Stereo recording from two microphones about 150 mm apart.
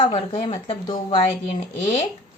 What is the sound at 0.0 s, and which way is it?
A woman's voice, 40° left (ahead or behind).